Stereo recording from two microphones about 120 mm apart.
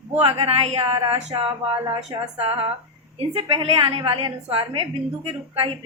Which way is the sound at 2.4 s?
50° right (ahead or behind).